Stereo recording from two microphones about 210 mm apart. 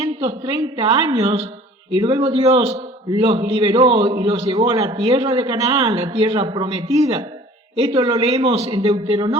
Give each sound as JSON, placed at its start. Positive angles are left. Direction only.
{"t": 0.0, "sound": "a man's voice", "side_deg": -30}